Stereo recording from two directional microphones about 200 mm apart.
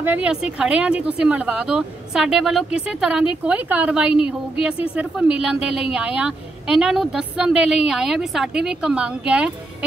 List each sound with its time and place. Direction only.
0.0 s a woman's voice: 5° right (ahead or behind)